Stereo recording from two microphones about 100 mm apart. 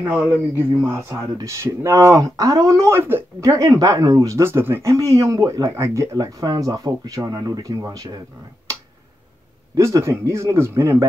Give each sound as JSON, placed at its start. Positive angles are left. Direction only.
{"t": 0.0, "sound": "speech", "side_deg": -20}
{"t": 9.8, "sound": "speech", "side_deg": -30}